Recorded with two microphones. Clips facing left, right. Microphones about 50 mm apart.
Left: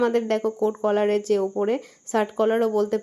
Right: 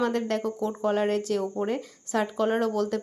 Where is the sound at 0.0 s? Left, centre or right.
Left.